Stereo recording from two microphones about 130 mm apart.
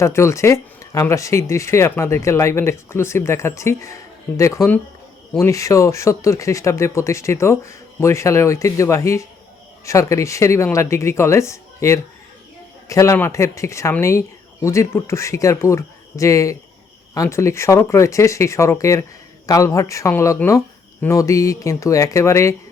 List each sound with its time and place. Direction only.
0.0 s speech: 20° left (ahead or behind)